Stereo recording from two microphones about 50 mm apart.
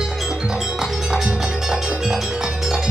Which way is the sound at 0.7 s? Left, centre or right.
Centre.